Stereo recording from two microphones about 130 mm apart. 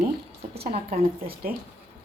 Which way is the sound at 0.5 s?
50° right (ahead or behind).